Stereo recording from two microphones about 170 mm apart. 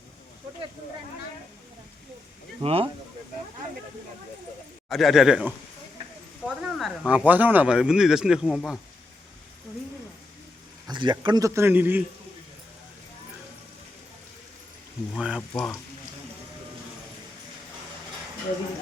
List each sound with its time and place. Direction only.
2.6 s speech: 35° right (ahead or behind)
4.9 s speech: centre (ahead or behind)
6.6 s speech: centre (ahead or behind)
10.8 s a man's voice: 25° right (ahead or behind); by 12.0 s 10° right (ahead or behind)
15.1 s speech: 5° right (ahead or behind)